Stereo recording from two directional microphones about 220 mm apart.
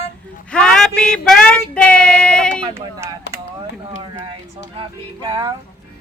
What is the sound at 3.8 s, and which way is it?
Music, 20° right (ahead or behind).